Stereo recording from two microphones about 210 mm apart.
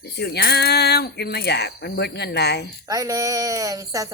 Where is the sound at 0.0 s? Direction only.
50° left (ahead or behind).